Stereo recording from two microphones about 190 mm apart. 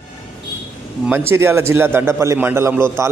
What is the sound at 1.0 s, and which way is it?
A man's voice, 10° right (ahead or behind).